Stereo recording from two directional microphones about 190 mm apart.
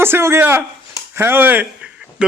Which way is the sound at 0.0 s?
15° right (ahead or behind).